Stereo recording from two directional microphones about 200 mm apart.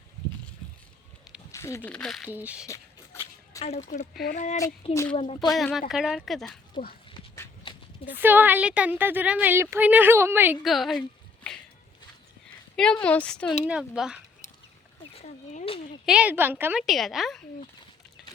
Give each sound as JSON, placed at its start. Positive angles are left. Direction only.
{"t": 1.5, "sound": "a woman's voice", "side_deg": 15}
{"t": 2.6, "sound": "a sound", "side_deg": 15}
{"t": 3.6, "sound": "speech", "side_deg": 35}
{"t": 5.5, "sound": "a woman's voice", "side_deg": 0}
{"t": 7.6, "sound": "clip-clop", "side_deg": 25}
{"t": 8.0, "sound": "a woman's voice", "side_deg": -10}
{"t": 12.7, "sound": "a woman's voice", "side_deg": 5}
{"t": 15.1, "sound": "a sound", "side_deg": 30}
{"t": 16.0, "sound": "a woman's voice", "side_deg": -5}